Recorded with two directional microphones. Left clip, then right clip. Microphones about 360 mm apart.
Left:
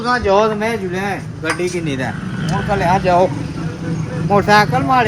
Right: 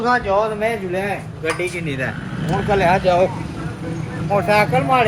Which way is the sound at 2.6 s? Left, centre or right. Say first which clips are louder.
Even; left.